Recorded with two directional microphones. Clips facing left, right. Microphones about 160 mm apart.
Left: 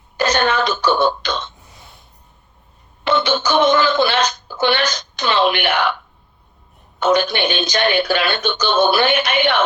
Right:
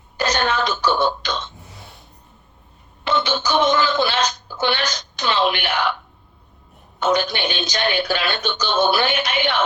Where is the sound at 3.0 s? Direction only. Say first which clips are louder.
Left 4 dB; 60° left (ahead or behind).